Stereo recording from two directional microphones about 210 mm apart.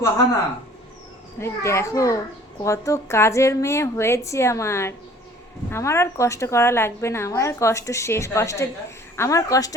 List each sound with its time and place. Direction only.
1.4 s a woman's voice: 15° left (ahead or behind)